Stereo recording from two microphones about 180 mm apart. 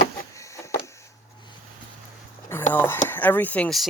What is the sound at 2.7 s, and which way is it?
Speech, 10° left (ahead or behind).